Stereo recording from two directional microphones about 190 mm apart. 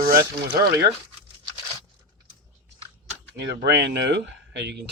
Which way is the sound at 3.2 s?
60° right (ahead or behind).